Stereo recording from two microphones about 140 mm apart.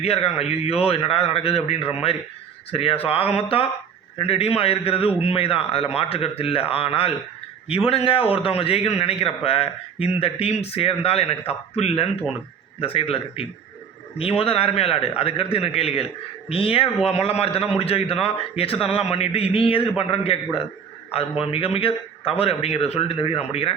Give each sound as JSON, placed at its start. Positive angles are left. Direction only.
{"t": 0.0, "sound": "a man's voice", "side_deg": 45}
{"t": 21.5, "sound": "a man's voice", "side_deg": 40}